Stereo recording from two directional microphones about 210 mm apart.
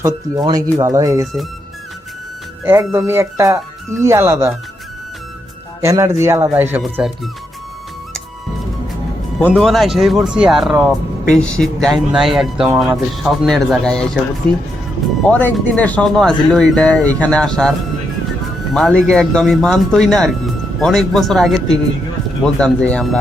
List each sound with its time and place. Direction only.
0.0 s speech: 20° right (ahead or behind)
2.6 s speech: 10° right (ahead or behind)
5.8 s speech: 15° right (ahead or behind)
9.5 s speech: centre (ahead or behind)
15.3 s speech: 5° left (ahead or behind)